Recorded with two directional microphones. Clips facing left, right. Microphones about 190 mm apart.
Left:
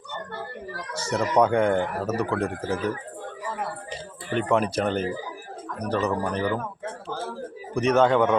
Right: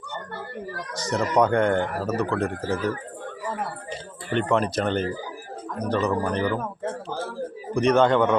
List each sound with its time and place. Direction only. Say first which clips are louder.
0.9 s speech: even; 10° left (ahead or behind)
4.4 s speech: even; 10° left (ahead or behind)
7.7 s a man's voice: right 1 dB; 5° left (ahead or behind)